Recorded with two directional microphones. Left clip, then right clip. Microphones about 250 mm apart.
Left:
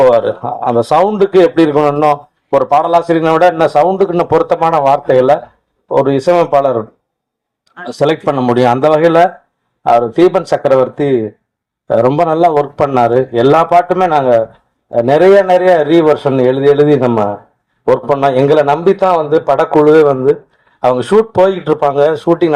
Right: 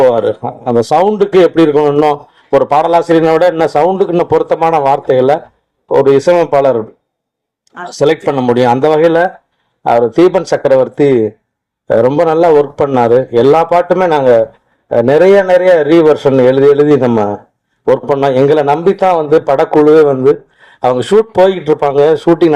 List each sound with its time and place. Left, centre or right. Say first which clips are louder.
0.0 s a man's voice: even; right